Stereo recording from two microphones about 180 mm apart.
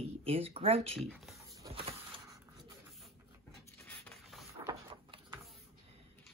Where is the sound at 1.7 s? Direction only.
30° right (ahead or behind).